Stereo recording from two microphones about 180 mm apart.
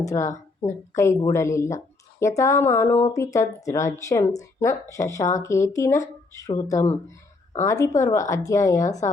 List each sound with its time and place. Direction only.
0.0 s speech: 20° left (ahead or behind)